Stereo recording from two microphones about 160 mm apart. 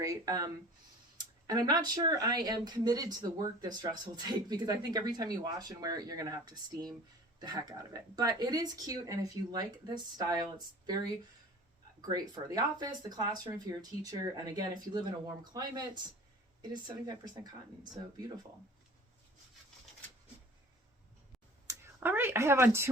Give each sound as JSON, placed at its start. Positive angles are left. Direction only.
{"t": 0.0, "sound": "speech", "side_deg": -20}
{"t": 12.0, "sound": "speech", "side_deg": -25}
{"t": 21.7, "sound": "speech", "side_deg": -15}